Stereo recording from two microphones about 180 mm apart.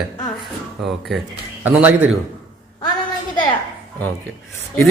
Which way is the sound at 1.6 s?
10° right (ahead or behind).